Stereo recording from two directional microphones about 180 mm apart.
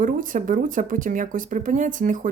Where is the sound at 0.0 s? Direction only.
45° right (ahead or behind).